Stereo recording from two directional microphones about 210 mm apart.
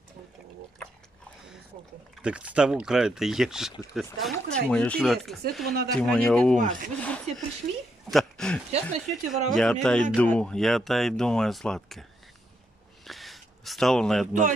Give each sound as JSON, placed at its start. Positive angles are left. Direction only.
{"t": 2.2, "sound": "speech", "side_deg": -5}
{"t": 6.6, "sound": "speech", "side_deg": -40}
{"t": 7.0, "sound": "speech", "side_deg": 5}
{"t": 13.0, "sound": "a sound", "side_deg": 0}